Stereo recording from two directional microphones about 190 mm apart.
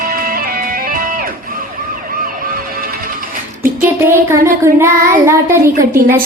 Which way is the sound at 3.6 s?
10° right (ahead or behind).